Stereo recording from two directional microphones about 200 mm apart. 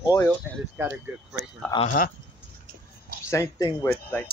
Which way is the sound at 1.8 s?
45° left (ahead or behind).